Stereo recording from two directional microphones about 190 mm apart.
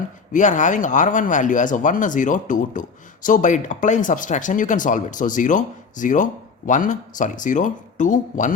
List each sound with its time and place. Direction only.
0.3 s speech: 40° left (ahead or behind)